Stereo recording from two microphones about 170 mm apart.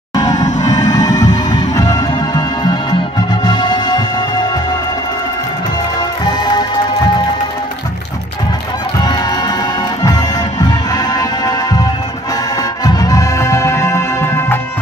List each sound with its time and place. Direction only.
0.3 s music: 45° left (ahead or behind)
1.7 s music: 20° left (ahead or behind)
5.9 s music: 25° left (ahead or behind)
9.0 s music: 25° left (ahead or behind)
10.9 s music: 25° left (ahead or behind)
12.8 s music: 20° left (ahead or behind)